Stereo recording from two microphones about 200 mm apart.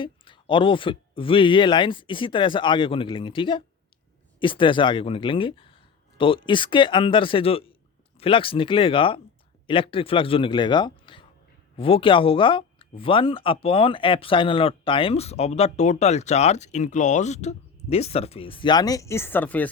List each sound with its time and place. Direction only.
0.0 s speech: 25° left (ahead or behind); by 19.7 s 10° left (ahead or behind)